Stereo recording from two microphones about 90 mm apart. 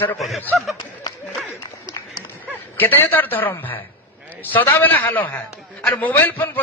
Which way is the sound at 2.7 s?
20° left (ahead or behind).